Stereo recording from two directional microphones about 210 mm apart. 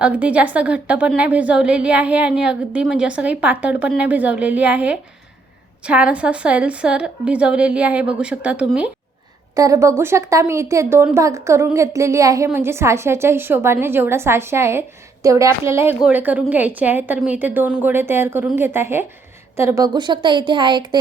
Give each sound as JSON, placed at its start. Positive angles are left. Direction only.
{"t": 0.0, "sound": "a woman's voice", "side_deg": -5}